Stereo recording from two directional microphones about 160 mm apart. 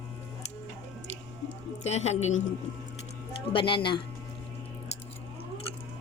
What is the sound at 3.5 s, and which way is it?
Speech, 30° left (ahead or behind).